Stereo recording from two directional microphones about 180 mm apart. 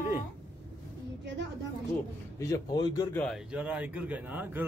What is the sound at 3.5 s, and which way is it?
A man's voice, 5° right (ahead or behind).